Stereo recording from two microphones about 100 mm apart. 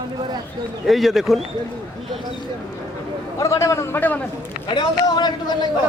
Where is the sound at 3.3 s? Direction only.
30° left (ahead or behind).